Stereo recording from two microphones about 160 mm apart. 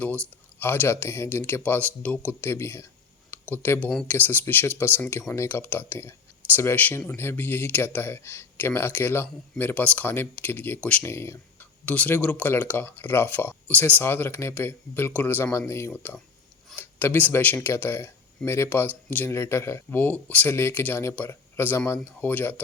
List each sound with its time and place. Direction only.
0.6 s speech: 15° left (ahead or behind)